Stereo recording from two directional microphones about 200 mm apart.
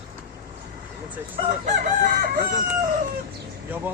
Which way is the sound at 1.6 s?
45° right (ahead or behind).